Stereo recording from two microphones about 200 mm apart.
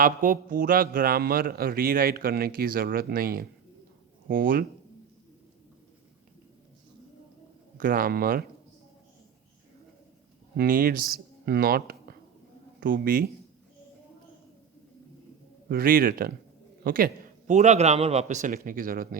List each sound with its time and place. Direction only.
0.0 s a man's voice: 45° right (ahead or behind)
7.8 s a man's voice: 45° right (ahead or behind)
10.6 s a man's voice: 45° right (ahead or behind)
15.7 s a man's voice: 45° right (ahead or behind)
17.5 s a man's voice: 35° right (ahead or behind)